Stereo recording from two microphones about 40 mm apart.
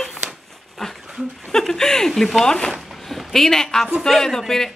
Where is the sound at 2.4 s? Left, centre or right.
Left.